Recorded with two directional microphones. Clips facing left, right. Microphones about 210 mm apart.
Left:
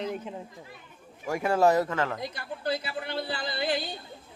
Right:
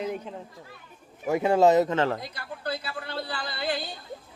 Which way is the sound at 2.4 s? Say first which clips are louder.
Left 2 dB; 20° left (ahead or behind).